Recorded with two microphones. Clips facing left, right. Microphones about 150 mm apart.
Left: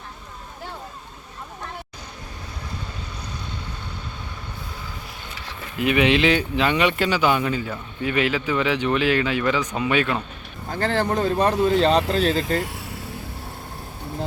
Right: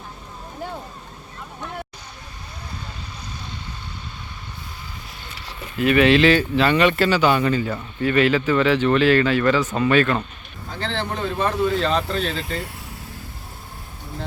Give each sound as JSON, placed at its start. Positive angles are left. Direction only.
{"t": 5.8, "sound": "speech", "side_deg": 15}
{"t": 10.7, "sound": "speech", "side_deg": 50}